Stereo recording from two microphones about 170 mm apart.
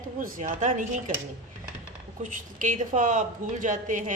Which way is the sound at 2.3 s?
50° right (ahead or behind).